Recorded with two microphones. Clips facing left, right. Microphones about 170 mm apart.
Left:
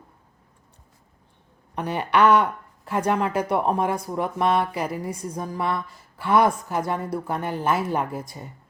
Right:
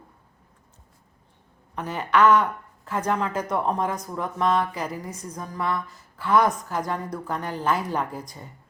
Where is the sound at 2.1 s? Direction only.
65° left (ahead or behind).